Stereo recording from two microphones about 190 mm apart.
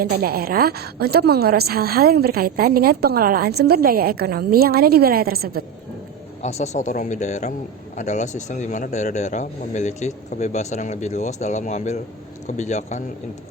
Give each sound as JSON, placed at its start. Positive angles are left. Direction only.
{"t": 0.0, "sound": "a woman's voice", "side_deg": -55}
{"t": 6.4, "sound": "speech", "side_deg": 35}